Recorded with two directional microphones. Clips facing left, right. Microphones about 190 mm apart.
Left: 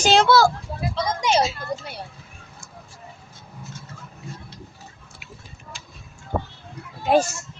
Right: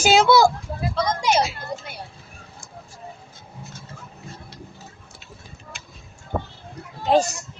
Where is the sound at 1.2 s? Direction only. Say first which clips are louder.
Left 2 dB; 25° left (ahead or behind).